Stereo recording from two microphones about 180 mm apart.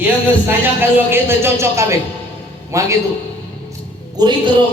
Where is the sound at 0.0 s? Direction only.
10° right (ahead or behind).